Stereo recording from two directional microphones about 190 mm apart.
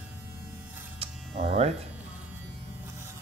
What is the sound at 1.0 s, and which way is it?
Electric shaver, 35° right (ahead or behind).